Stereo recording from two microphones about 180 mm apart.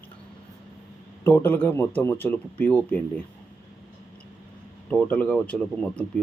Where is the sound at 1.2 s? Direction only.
10° left (ahead or behind).